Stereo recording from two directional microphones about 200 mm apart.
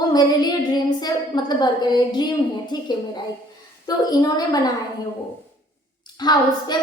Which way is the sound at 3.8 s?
20° left (ahead or behind).